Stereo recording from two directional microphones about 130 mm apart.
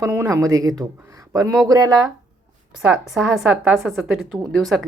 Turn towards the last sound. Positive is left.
turn(degrees=0)  # may be behind; listen again after turning